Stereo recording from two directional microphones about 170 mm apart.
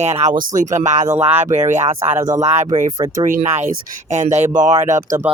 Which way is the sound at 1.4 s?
45° right (ahead or behind).